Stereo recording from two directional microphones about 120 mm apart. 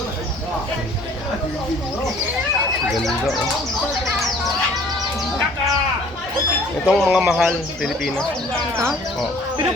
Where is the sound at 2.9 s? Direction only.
Centre (ahead or behind).